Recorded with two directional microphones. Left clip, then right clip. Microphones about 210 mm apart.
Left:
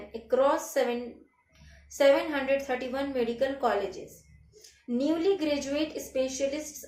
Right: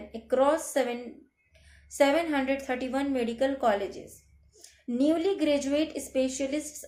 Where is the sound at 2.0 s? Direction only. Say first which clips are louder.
Left 1 dB; 45° right (ahead or behind).